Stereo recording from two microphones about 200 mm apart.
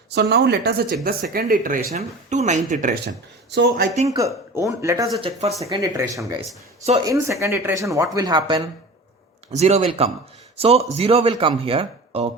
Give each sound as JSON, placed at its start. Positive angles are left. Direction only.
{"t": 0.1, "sound": "speech", "side_deg": -55}
{"t": 3.5, "sound": "speech", "side_deg": -55}
{"t": 3.9, "sound": "speech", "side_deg": -30}
{"t": 4.5, "sound": "speech", "side_deg": -15}
{"t": 5.2, "sound": "speech", "side_deg": -30}
{"t": 5.5, "sound": "speech", "side_deg": -15}
{"t": 9.5, "sound": "speech", "side_deg": -35}